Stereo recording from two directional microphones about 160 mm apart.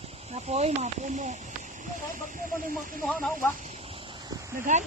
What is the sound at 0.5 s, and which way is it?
Speech, 45° right (ahead or behind).